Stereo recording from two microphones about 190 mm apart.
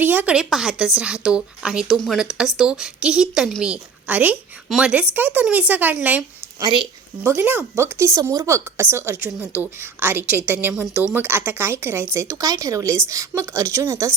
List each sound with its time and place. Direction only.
0.0 s a woman's voice: 10° right (ahead or behind)
6.6 s speech: 25° right (ahead or behind)
7.2 s speech: 10° right (ahead or behind)